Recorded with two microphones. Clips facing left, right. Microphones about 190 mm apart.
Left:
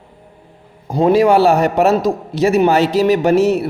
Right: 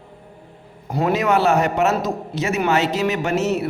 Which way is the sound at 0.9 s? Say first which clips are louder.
Left 7 dB; 30° left (ahead or behind).